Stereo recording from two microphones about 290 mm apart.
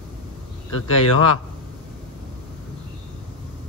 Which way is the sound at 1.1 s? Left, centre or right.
Left.